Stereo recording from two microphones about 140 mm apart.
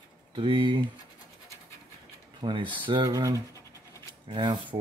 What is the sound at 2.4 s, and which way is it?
Speech, 30° right (ahead or behind).